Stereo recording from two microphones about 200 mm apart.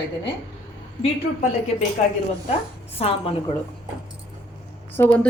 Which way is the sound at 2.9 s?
30° left (ahead or behind).